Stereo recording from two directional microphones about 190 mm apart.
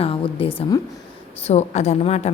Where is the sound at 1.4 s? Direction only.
35° left (ahead or behind).